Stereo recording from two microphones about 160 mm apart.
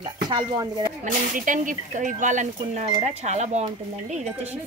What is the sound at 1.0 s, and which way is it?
Speech, 55° right (ahead or behind).